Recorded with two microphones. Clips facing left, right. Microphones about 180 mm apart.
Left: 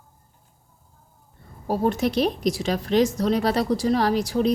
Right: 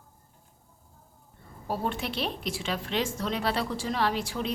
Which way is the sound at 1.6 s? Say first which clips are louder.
Left 9 dB; 40° left (ahead or behind).